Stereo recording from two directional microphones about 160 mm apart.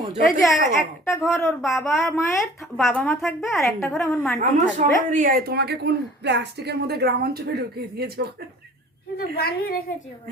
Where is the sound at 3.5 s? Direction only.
20° left (ahead or behind).